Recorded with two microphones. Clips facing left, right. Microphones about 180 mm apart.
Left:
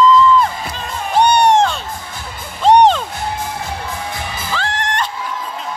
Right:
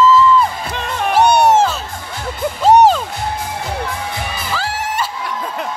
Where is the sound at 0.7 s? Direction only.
65° right (ahead or behind).